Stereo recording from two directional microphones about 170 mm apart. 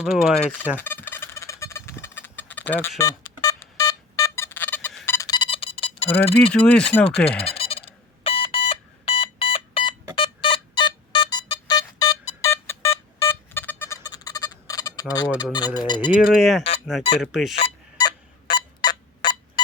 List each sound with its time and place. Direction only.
0.0 s speech: centre (ahead or behind)
0.8 s fowl: 10° left (ahead or behind)
5.0 s a sound: 20° left (ahead or behind)
6.5 s speech: 5° left (ahead or behind)
7.5 s a sound: 35° left (ahead or behind)
10.2 s music: 30° left (ahead or behind)
15.5 s speech: 25° left (ahead or behind)
16.1 s speech: centre (ahead or behind)
17.6 s a sound: 30° left (ahead or behind)